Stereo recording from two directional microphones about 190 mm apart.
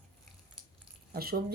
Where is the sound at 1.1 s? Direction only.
50° right (ahead or behind).